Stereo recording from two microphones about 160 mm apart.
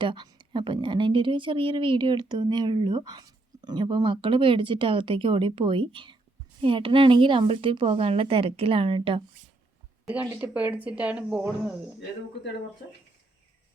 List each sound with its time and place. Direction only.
0.0 s a woman's voice: 30° right (ahead or behind)
10.1 s speech: 10° right (ahead or behind)